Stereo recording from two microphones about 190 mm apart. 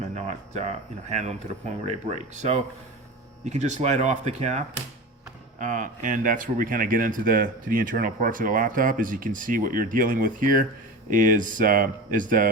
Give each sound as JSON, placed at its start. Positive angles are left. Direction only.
{"t": 0.1, "sound": "speech", "side_deg": -35}